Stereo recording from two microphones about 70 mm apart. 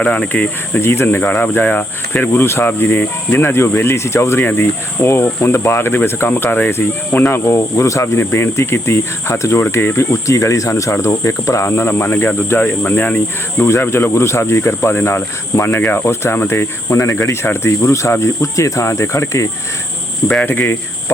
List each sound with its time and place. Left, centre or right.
0.0 s speech: left
0.8 s speech: left
10.2 s cricket: left
12.5 s speech: left
13.7 s speech: left
16.5 s cricket: left
20.4 s speech: left